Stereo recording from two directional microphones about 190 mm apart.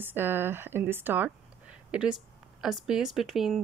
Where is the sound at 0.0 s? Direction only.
10° right (ahead or behind).